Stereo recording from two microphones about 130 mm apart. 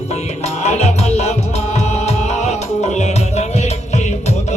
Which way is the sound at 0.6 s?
55° left (ahead or behind).